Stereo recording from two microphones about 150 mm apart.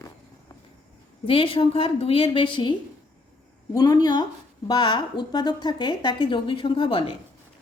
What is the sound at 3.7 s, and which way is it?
A woman's voice, 25° left (ahead or behind).